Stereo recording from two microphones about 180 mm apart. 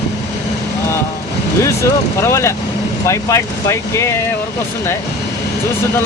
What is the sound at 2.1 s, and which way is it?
Speech, 15° left (ahead or behind).